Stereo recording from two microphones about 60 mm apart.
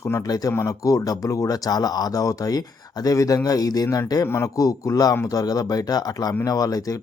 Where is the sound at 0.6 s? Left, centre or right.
Left.